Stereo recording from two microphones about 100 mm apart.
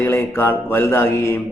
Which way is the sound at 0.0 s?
25° left (ahead or behind).